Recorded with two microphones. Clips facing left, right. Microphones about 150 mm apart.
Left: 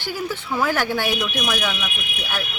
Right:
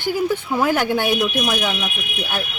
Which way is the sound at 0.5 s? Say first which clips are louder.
Right 1 dB; 15° right (ahead or behind).